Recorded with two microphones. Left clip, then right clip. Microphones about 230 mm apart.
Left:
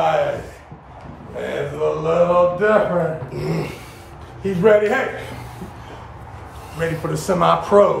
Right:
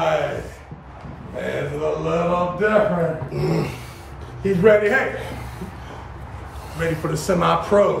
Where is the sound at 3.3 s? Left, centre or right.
Centre.